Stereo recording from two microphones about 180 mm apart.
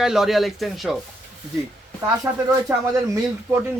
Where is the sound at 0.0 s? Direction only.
5° right (ahead or behind).